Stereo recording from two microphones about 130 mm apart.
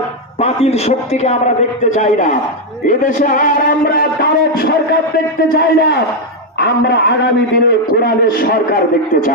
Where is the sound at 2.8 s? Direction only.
90° left.